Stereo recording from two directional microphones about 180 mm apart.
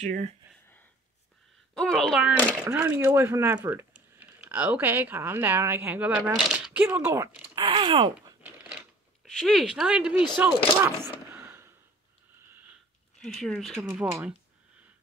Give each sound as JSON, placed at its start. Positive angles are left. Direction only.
{"t": 0.0, "sound": "speech", "side_deg": -40}
{"t": 1.8, "sound": "speech", "side_deg": 5}
{"t": 2.6, "sound": "speech", "side_deg": -10}
{"t": 7.5, "sound": "speech", "side_deg": -25}
{"t": 9.2, "sound": "speech", "side_deg": 0}
{"t": 11.3, "sound": "a sound", "side_deg": -15}
{"t": 13.2, "sound": "speech", "side_deg": 5}
{"t": 13.8, "sound": "speech", "side_deg": -10}